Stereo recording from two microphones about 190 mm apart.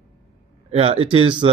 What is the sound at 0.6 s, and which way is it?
Speech, 30° right (ahead or behind).